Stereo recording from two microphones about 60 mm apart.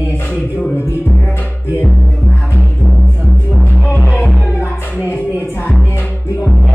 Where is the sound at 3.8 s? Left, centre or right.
Left.